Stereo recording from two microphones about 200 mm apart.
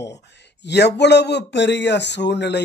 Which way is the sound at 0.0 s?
60° left (ahead or behind).